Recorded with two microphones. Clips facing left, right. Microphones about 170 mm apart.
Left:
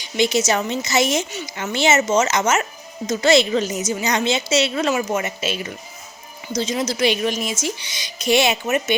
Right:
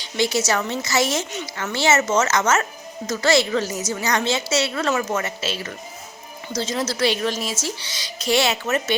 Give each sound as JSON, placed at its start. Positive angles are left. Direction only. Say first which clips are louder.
{"t": 0.0, "sound": "a woman's voice", "louder": "left 3 dB", "side_deg": 20}